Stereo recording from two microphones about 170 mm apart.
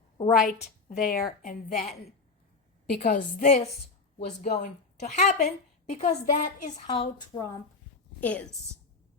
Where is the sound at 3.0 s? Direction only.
55° left (ahead or behind).